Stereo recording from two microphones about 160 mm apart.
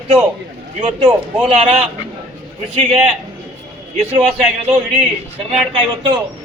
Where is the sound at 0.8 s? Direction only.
35° right (ahead or behind).